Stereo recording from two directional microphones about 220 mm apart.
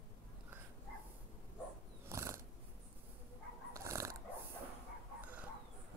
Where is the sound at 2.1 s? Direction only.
10° right (ahead or behind).